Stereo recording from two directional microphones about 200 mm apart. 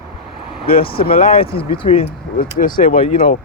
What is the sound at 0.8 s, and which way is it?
Speech, 25° left (ahead or behind).